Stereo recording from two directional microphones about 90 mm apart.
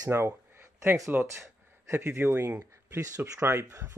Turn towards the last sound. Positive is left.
turn(degrees=-40)  # may be behind; listen again after turning